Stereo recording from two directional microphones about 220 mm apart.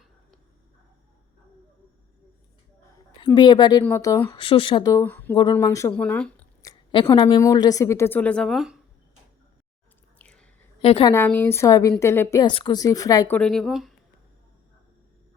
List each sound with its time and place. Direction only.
3.3 s a woman's voice: 20° left (ahead or behind)
4.4 s a woman's voice: 25° left (ahead or behind); by 8.8 s centre (ahead or behind)
10.2 s whispering: 5° left (ahead or behind)
10.8 s a woman's voice: 25° left (ahead or behind)
11.1 s a woman's voice: 10° left (ahead or behind)